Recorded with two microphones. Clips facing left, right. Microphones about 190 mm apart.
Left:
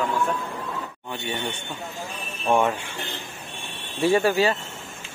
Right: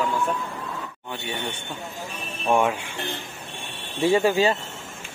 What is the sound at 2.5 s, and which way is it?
Speech, 10° right (ahead or behind).